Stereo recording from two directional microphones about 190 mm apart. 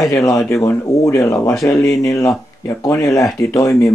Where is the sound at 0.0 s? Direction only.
20° left (ahead or behind).